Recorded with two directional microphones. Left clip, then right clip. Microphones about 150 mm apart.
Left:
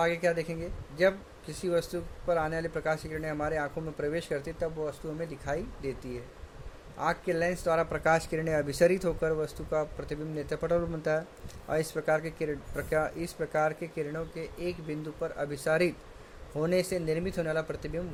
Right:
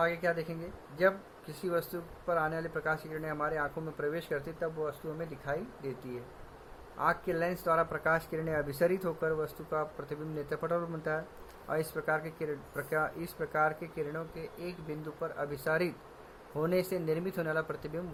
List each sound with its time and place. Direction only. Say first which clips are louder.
0.0 s speech: left 3 dB; 35° left (ahead or behind)
7.0 s speech: left 2 dB; 25° left (ahead or behind)